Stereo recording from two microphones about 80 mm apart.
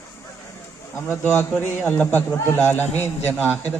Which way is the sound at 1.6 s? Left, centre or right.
Left.